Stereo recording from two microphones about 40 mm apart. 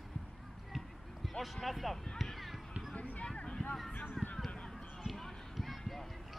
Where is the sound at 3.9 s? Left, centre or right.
Left.